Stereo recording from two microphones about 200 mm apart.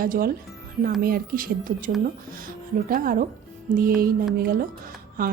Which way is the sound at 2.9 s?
45° right (ahead or behind).